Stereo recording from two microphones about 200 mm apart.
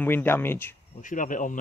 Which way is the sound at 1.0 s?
40° left (ahead or behind).